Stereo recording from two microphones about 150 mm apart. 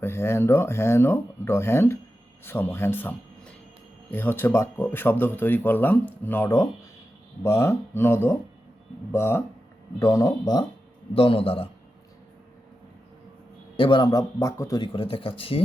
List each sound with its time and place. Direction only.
0.0 s speech: 15° left (ahead or behind)
11.1 s speech: 40° left (ahead or behind)
13.7 s speech: 35° left (ahead or behind)
14.9 s speech: 35° left (ahead or behind)